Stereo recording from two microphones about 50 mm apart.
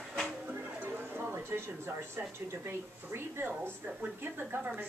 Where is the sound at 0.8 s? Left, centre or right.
Right.